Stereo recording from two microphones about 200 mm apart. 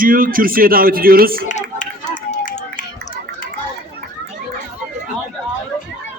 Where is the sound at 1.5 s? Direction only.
35° left (ahead or behind).